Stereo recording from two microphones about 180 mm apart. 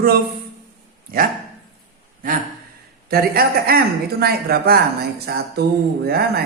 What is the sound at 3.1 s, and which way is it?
Speech, 60° right (ahead or behind).